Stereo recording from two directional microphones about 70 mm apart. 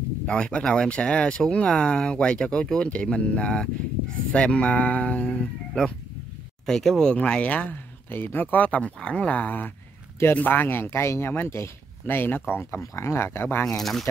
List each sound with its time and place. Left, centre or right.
0.3 s speech: centre; by 13.7 s left
13.7 s speech: centre